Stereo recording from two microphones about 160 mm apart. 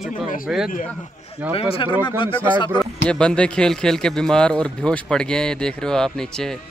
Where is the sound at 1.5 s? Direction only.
35° left (ahead or behind).